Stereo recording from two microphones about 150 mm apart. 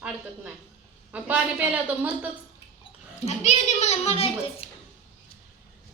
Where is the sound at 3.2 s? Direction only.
50° left (ahead or behind).